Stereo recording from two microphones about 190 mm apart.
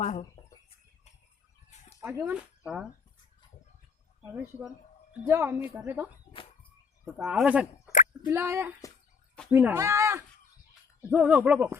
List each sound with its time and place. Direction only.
0.0 s speech: 40° left (ahead or behind)
2.0 s speech: 10° right (ahead or behind)
5.2 s speech: 10° right (ahead or behind)
6.3 s chicken: 30° left (ahead or behind)
7.0 s speech: centre (ahead or behind)